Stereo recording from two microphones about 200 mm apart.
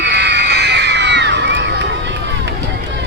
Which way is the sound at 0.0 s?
55° right (ahead or behind).